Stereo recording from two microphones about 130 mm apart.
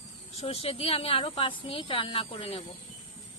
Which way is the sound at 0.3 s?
50° left (ahead or behind).